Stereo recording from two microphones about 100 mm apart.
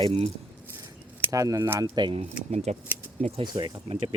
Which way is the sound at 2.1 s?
90° right.